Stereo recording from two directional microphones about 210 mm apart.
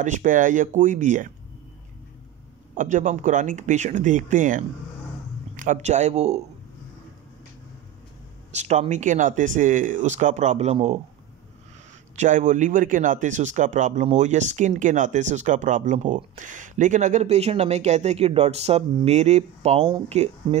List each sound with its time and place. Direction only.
0.0 s speech: 40° right (ahead or behind)
2.7 s speech: 40° right (ahead or behind)
8.5 s speech: 35° right (ahead or behind)
12.2 s speech: 35° right (ahead or behind)